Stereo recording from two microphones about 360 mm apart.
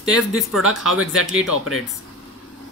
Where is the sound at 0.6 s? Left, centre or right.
Right.